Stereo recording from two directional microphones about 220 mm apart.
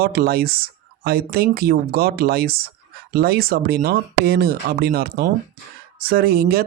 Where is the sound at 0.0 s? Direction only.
45° right (ahead or behind).